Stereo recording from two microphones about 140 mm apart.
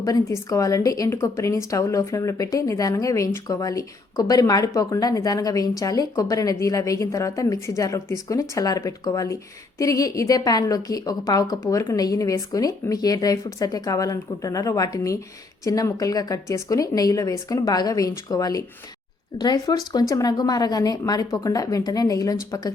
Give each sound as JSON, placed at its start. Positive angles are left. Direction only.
{"t": 0.0, "sound": "a woman's voice", "side_deg": 25}